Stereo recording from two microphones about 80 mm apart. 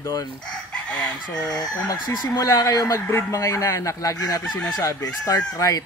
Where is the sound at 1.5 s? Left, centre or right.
Left.